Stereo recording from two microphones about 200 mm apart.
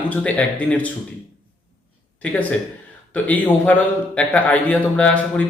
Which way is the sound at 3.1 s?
10° left (ahead or behind).